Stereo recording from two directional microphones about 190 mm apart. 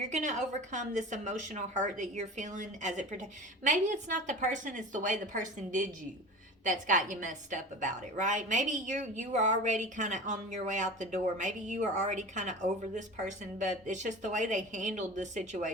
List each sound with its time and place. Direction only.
0.1 s a woman's voice: 40° right (ahead or behind)